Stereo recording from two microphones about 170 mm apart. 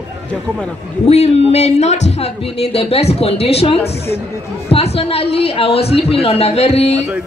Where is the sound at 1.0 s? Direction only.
40° left (ahead or behind).